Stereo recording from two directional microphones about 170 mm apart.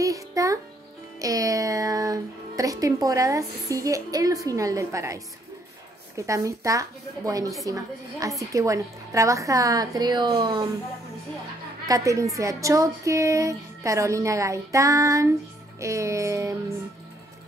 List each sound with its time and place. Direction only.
0.0 s music: 20° right (ahead or behind)
1.2 s speech: 20° right (ahead or behind)
11.9 s speech: 20° right (ahead or behind)
15.8 s music: 15° right (ahead or behind)